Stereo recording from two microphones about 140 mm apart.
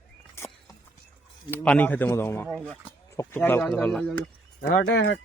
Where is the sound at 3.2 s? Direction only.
15° left (ahead or behind).